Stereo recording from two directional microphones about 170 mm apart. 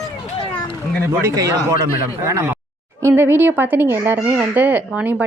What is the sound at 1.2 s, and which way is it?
A woman's voice, 15° right (ahead or behind).